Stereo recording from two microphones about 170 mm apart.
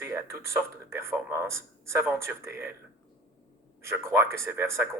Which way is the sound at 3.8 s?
15° right (ahead or behind).